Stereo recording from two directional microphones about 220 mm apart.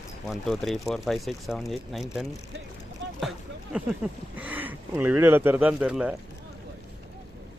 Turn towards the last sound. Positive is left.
turn(degrees=-5)  # may be behind; listen again after turning